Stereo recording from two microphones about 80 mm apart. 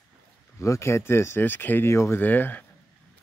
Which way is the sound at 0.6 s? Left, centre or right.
Left.